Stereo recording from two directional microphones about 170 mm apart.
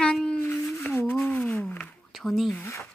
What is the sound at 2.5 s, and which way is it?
Speech, 15° left (ahead or behind).